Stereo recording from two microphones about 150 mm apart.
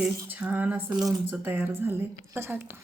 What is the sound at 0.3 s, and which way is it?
A woman's voice, 10° right (ahead or behind).